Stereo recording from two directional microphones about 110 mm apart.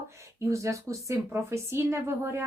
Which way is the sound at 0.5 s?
30° right (ahead or behind).